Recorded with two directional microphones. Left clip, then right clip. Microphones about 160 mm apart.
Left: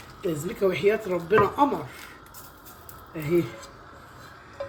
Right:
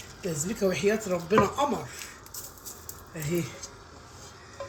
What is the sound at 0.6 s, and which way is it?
Speech, 55° left (ahead or behind).